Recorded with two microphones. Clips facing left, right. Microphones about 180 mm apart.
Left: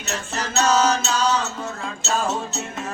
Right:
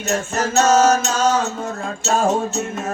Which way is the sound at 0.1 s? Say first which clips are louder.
Right 7 dB; 45° right (ahead or behind).